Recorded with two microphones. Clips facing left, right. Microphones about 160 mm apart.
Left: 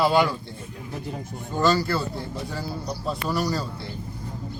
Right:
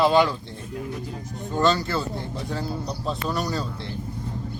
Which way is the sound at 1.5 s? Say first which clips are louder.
Even; 5° left (ahead or behind).